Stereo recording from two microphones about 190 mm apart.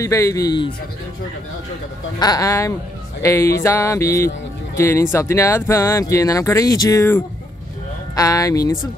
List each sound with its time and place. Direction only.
0.0 s speech: 15° left (ahead or behind)
2.1 s speech: 20° left (ahead or behind)